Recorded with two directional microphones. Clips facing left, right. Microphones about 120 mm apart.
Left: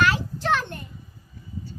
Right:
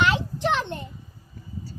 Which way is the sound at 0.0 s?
20° right (ahead or behind).